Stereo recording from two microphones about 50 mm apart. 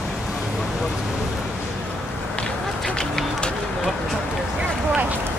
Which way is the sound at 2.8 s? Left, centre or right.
Centre.